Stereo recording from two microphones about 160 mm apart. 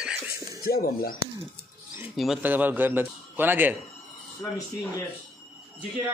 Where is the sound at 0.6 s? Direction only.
65° left (ahead or behind).